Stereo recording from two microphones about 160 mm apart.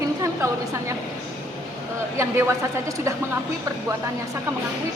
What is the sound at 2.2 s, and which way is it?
Speech, 15° right (ahead or behind).